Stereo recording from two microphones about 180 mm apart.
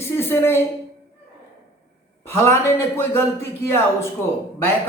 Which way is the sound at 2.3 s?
15° left (ahead or behind).